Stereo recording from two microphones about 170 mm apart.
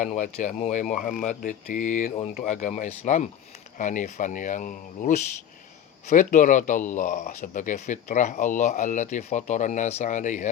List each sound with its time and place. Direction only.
0.0 s speech: 50° left (ahead or behind)